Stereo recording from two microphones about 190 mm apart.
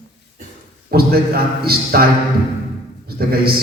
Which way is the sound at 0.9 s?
55° right (ahead or behind).